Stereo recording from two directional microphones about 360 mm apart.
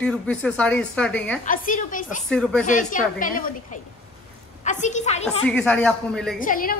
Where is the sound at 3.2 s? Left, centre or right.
Left.